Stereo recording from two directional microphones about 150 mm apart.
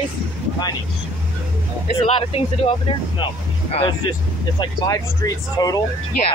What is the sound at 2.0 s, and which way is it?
Speech, 45° left (ahead or behind).